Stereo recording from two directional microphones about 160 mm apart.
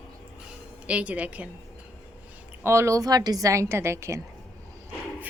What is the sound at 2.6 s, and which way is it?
A woman's voice, 15° right (ahead or behind).